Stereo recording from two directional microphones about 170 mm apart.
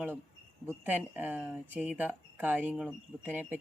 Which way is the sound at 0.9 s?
10° right (ahead or behind).